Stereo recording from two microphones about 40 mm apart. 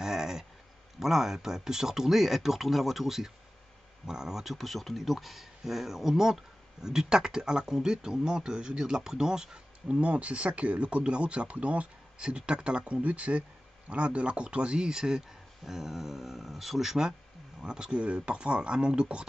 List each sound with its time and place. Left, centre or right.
0.0 s a sound: centre
0.9 s speech: centre
10.0 s speech: right
12.9 s speech: right; by 17.1 s centre
17.6 s speech: centre